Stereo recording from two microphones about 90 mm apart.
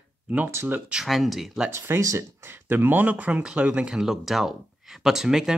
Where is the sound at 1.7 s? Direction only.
30° right (ahead or behind).